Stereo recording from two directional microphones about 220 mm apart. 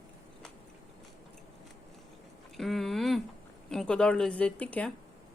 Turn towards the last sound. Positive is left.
turn(degrees=5)  # may be behind; listen again after turning